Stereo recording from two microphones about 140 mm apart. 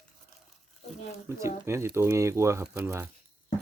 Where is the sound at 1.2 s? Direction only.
20° right (ahead or behind).